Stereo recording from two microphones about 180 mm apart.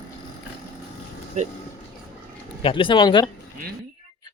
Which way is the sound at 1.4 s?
40° right (ahead or behind).